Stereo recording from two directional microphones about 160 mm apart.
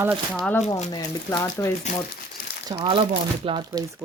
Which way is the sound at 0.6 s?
45° left (ahead or behind).